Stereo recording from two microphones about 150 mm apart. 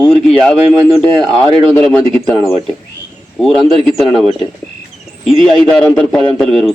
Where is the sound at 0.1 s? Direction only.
5° left (ahead or behind).